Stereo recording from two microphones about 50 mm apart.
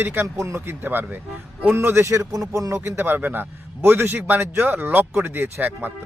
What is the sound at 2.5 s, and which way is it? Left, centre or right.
Speech, right.